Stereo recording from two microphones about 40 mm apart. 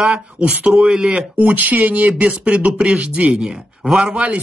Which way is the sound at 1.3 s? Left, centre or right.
Right.